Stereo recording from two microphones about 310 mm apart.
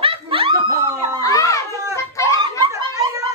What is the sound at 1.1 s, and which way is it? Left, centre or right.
Speech, centre.